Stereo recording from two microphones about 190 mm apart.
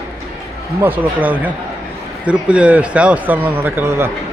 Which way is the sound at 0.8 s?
10° right (ahead or behind).